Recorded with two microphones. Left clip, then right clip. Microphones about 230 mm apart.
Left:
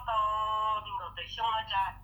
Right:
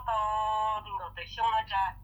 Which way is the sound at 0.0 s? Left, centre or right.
Right.